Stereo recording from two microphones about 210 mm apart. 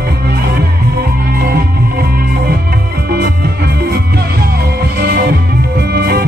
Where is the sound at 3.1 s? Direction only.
50° right (ahead or behind).